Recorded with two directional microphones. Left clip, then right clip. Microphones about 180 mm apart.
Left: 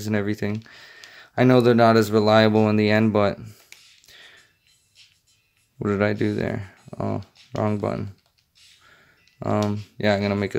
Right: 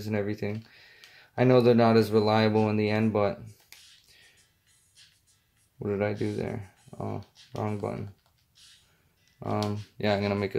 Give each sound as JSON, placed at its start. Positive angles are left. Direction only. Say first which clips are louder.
{"t": 0.0, "sound": "speech", "louder": "left 5 dB", "side_deg": 50}
{"t": 4.1, "sound": "a sound", "louder": "left 10 dB", "side_deg": 45}
{"t": 5.8, "sound": "speech", "louder": "left 7 dB", "side_deg": 50}
{"t": 9.6, "sound": "speech", "louder": "left 6 dB", "side_deg": 35}